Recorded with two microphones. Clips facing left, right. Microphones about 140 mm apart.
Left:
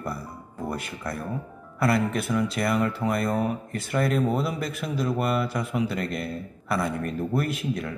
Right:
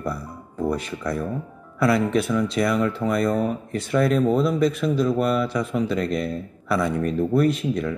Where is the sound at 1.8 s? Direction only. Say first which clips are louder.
Right 4 dB; centre (ahead or behind).